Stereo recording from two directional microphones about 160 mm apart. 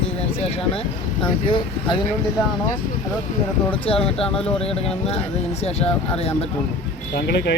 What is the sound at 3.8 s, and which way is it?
Speech, 35° left (ahead or behind).